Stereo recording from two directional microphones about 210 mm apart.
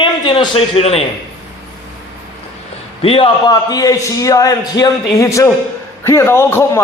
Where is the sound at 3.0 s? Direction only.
25° left (ahead or behind).